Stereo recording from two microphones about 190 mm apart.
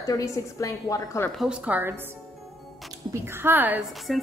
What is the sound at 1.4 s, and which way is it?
Speech, 5° right (ahead or behind).